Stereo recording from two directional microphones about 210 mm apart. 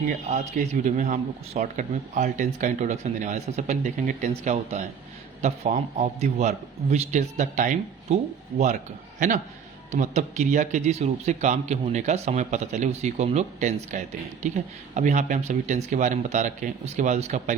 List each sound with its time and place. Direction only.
0.3 s a man's voice: 35° right (ahead or behind)